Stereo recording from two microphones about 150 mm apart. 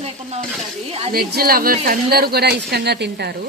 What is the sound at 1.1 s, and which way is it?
Speech, 90° right.